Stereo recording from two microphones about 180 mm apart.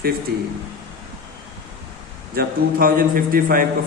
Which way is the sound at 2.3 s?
55° right (ahead or behind).